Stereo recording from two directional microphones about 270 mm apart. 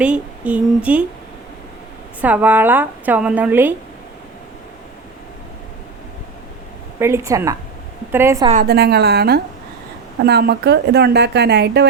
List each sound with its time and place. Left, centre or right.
0.0 s a woman's voice: centre
2.2 s a woman's voice: centre
7.0 s speech: centre
8.5 s speech: right